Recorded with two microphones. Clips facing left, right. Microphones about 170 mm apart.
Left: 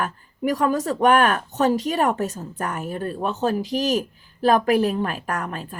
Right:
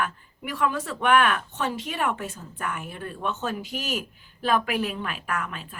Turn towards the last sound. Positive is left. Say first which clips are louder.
# left 4 dB
turn(degrees=40)  # may be behind; listen again after turning